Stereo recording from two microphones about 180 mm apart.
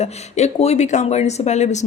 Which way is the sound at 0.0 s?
35° left (ahead or behind).